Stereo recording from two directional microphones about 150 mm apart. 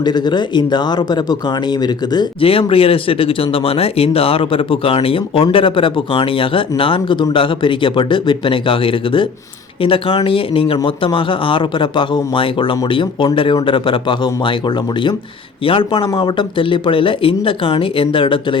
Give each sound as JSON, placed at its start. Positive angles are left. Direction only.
{"t": 0.0, "sound": "speech", "side_deg": 30}
{"t": 15.6, "sound": "speech", "side_deg": 35}